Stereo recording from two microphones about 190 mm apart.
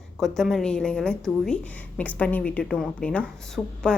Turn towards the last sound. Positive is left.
turn(degrees=5)  # may be behind; listen again after turning